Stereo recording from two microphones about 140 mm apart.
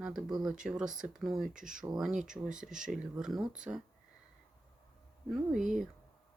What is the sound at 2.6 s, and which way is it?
Speech, 70° right (ahead or behind).